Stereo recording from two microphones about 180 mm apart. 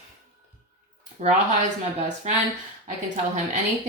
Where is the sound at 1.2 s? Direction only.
40° right (ahead or behind).